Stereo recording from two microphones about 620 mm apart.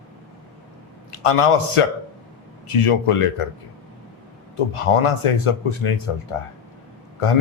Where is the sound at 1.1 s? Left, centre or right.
Left.